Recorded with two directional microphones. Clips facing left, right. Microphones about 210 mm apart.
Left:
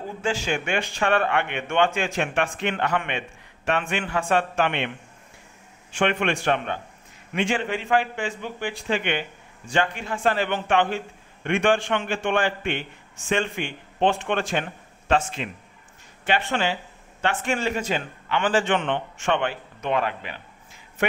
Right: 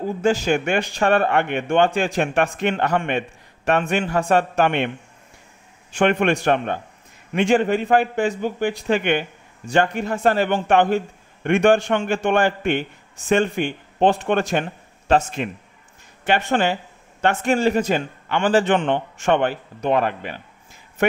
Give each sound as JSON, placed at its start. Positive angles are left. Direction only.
{"t": 0.2, "sound": "a man's voice", "side_deg": -40}